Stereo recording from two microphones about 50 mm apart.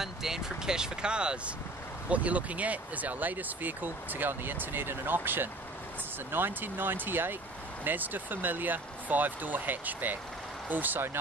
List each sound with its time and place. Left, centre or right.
0.0 s speech: centre; by 11.1 s right